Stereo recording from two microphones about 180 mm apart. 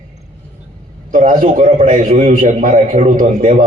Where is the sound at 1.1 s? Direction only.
50° right (ahead or behind).